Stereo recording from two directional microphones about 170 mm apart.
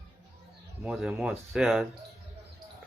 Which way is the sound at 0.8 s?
5° right (ahead or behind).